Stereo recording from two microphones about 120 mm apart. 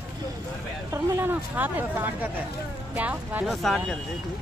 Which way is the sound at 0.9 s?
20° right (ahead or behind).